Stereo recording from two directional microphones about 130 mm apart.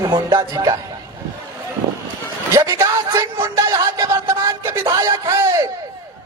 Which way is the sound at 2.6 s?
25° right (ahead or behind).